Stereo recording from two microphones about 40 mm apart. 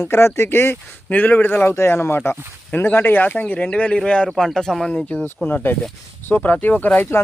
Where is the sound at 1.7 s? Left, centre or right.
Left.